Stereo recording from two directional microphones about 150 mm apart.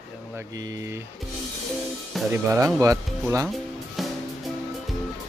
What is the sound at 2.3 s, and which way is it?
Speech, 20° right (ahead or behind).